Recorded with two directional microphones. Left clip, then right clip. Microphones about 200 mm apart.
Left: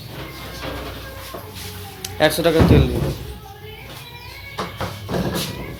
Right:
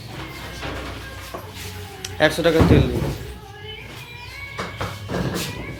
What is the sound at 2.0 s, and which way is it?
Speech, centre (ahead or behind).